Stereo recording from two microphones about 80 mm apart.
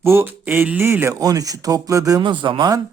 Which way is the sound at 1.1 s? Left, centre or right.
Right.